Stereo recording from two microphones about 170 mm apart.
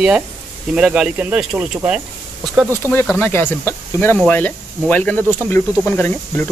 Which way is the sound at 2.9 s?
10° left (ahead or behind).